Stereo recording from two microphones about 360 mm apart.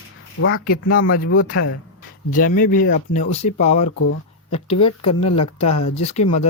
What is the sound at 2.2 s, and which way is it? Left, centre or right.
Speech, left.